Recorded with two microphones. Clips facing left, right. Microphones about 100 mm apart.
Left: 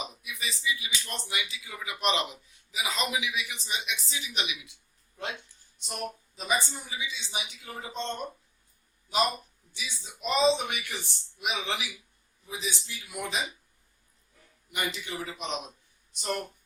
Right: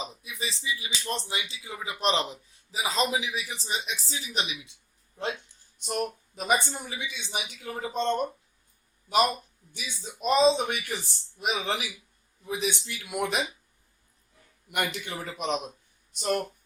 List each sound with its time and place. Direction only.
0.0 s a sound: 30° right (ahead or behind)
1.3 s a man's voice: 30° right (ahead or behind)
5.8 s speech: 50° right (ahead or behind)
9.7 s a man's voice: 50° right (ahead or behind)
12.5 s speech: 60° right (ahead or behind)
14.7 s a man's voice: 60° right (ahead or behind)